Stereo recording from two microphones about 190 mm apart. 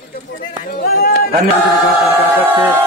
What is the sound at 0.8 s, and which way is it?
Speech, 55° left (ahead or behind).